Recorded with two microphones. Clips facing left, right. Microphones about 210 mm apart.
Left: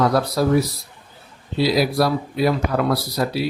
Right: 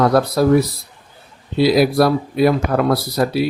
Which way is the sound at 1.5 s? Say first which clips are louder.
Right 5 dB; 55° right (ahead or behind).